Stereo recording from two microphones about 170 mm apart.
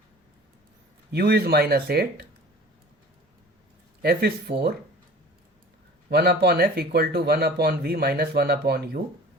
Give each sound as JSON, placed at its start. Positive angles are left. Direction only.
{"t": 1.1, "sound": "speech", "side_deg": -70}
{"t": 4.0, "sound": "speech", "side_deg": -65}
{"t": 6.1, "sound": "speech", "side_deg": -70}